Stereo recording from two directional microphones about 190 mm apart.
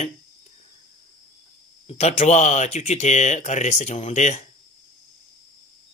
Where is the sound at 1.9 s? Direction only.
35° left (ahead or behind).